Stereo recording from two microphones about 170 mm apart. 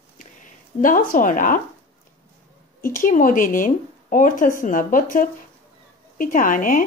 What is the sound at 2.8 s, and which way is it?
Speech, 55° left (ahead or behind).